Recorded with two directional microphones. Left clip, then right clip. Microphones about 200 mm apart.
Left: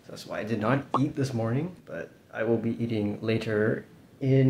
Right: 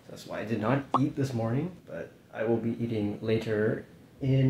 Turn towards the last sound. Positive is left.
turn(degrees=20)  # may be behind; listen again after turning